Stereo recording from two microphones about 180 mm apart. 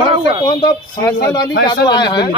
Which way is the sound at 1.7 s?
25° left (ahead or behind).